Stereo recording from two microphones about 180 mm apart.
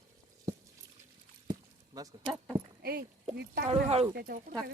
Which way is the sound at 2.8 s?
55° right (ahead or behind).